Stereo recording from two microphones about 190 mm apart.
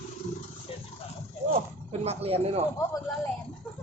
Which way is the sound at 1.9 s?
30° right (ahead or behind).